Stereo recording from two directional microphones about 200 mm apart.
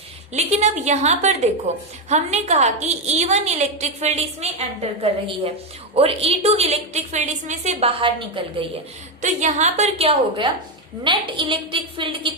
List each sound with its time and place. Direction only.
0.3 s a woman's voice: 35° right (ahead or behind)
5.9 s a woman's voice: 30° right (ahead or behind)
9.2 s a woman's voice: 35° right (ahead or behind)